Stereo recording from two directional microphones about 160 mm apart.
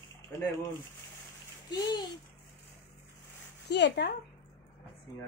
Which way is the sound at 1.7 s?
25° left (ahead or behind).